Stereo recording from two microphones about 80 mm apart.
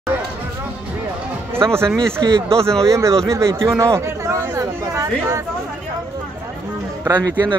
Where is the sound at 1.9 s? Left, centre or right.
Centre.